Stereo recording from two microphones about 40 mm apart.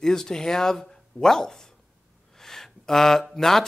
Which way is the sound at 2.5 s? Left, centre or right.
Centre.